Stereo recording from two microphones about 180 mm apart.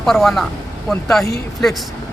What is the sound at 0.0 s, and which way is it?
Speech, centre (ahead or behind).